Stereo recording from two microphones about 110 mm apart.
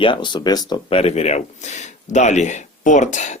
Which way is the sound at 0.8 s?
65° left (ahead or behind).